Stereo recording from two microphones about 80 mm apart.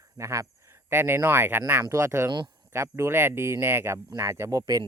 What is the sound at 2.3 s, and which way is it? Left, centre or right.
Speech, right.